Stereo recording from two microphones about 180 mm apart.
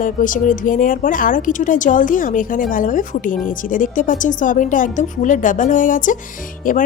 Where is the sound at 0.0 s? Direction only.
45° left (ahead or behind).